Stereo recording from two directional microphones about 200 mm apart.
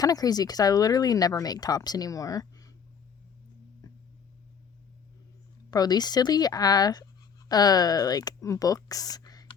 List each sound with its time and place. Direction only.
0.0 s speech: 20° left (ahead or behind)
5.7 s speech: 20° left (ahead or behind)